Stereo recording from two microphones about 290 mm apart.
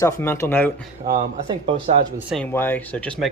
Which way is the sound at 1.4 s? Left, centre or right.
Centre.